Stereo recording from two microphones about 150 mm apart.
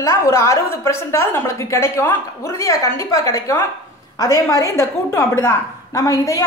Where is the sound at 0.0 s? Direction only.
20° left (ahead or behind).